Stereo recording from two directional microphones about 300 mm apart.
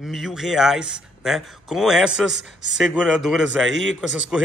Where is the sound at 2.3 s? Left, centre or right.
Right.